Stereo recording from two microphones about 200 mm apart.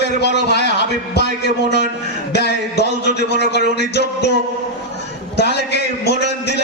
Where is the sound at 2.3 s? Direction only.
55° left (ahead or behind).